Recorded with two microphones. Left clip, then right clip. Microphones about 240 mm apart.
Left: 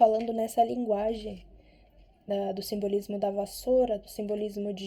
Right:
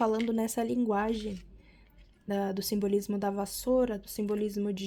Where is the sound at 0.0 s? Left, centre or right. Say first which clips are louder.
Left 6 dB; right.